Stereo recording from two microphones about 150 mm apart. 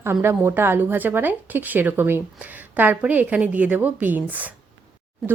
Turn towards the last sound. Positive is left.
turn(degrees=0)  # may be behind; listen again after turning